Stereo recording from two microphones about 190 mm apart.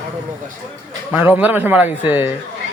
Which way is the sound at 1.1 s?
10° right (ahead or behind).